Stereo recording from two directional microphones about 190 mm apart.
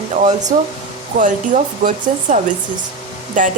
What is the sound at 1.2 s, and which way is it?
Speech, 40° right (ahead or behind).